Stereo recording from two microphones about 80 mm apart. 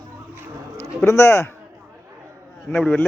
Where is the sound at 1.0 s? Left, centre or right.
Left.